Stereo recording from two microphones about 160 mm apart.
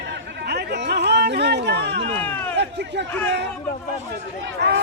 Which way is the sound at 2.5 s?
90° right.